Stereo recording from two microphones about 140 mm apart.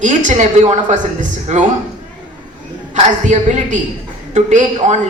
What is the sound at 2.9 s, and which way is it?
A man's voice, 60° right (ahead or behind).